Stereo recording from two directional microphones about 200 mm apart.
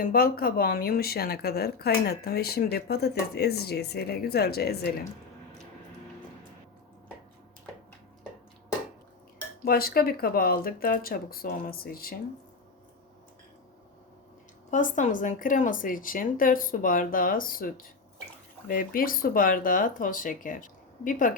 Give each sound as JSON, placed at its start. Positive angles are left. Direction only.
{"t": 0.0, "sound": "speech", "side_deg": 50}
{"t": 9.6, "sound": "speech", "side_deg": 50}
{"t": 14.7, "sound": "speech", "side_deg": 40}